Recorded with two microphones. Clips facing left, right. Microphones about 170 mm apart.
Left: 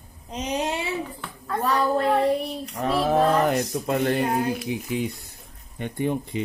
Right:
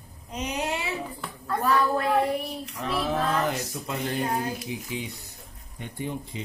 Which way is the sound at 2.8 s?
40° left (ahead or behind).